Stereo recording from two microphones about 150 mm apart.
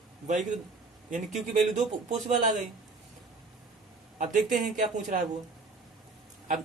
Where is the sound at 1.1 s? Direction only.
55° right (ahead or behind).